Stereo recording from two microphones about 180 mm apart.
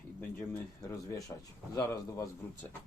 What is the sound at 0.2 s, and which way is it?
Speech, 15° left (ahead or behind).